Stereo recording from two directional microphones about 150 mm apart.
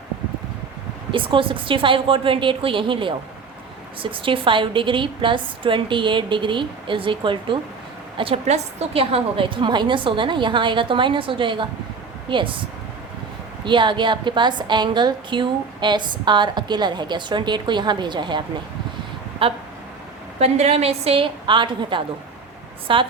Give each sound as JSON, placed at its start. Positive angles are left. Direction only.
{"t": 1.1, "sound": "a woman's voice", "side_deg": -35}
{"t": 13.7, "sound": "a woman's voice", "side_deg": -30}